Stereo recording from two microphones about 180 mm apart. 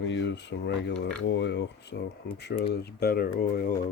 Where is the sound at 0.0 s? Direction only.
85° left.